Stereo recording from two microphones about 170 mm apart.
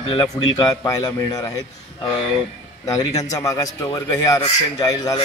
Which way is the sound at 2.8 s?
20° left (ahead or behind).